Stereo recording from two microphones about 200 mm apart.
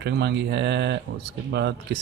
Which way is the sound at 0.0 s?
60° right (ahead or behind).